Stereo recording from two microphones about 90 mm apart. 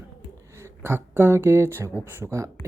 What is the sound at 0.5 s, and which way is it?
Speech, 30° right (ahead or behind).